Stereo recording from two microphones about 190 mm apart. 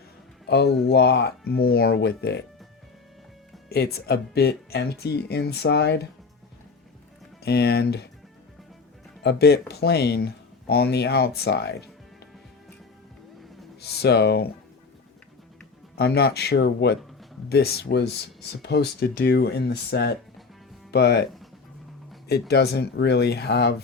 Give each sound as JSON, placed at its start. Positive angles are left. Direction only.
{"t": 0.4, "sound": "speech", "side_deg": 60}
{"t": 3.7, "sound": "speech", "side_deg": 55}
{"t": 7.4, "sound": "speech", "side_deg": 60}
{"t": 9.2, "sound": "speech", "side_deg": 60}
{"t": 13.8, "sound": "speech", "side_deg": 60}
{"t": 16.0, "sound": "speech", "side_deg": 55}
{"t": 22.3, "sound": "speech", "side_deg": 60}